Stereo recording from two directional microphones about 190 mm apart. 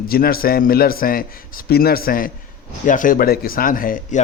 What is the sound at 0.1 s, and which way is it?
A man's voice, 50° left (ahead or behind).